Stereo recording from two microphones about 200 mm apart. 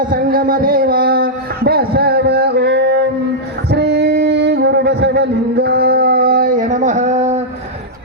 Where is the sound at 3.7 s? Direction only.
55° right (ahead or behind); by 7.3 s 35° right (ahead or behind).